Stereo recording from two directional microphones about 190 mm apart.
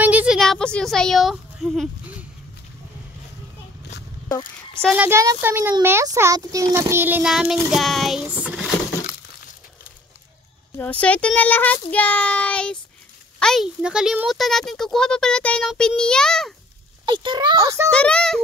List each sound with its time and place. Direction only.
0.0 s a sound: 10° right (ahead or behind)
0.4 s speech: 5° left (ahead or behind)
4.8 s a child's voice: 10° right (ahead or behind)
10.8 s speech: 5° left (ahead or behind)
17.0 s a child's voice: 25° right (ahead or behind)
17.9 s speech: 5° left (ahead or behind)